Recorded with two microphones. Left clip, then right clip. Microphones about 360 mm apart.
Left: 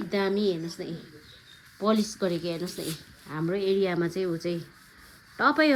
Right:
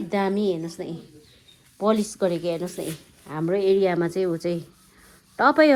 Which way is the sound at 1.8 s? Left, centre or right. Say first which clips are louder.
Right 4 dB; centre.